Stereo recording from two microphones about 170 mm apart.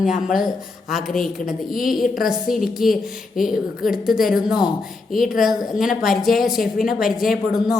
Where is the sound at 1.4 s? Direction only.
55° left (ahead or behind).